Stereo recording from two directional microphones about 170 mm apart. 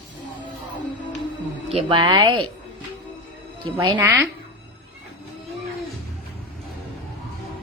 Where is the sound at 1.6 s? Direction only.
30° right (ahead or behind).